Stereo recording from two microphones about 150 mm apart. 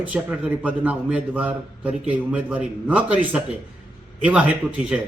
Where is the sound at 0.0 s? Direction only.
10° right (ahead or behind).